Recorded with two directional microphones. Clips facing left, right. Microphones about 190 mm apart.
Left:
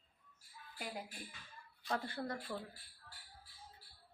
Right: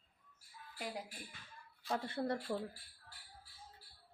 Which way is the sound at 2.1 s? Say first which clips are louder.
Right 5 dB; 30° right (ahead or behind).